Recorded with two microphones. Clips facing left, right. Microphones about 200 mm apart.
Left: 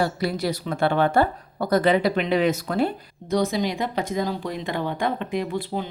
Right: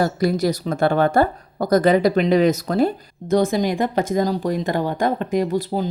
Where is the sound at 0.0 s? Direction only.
45° right (ahead or behind).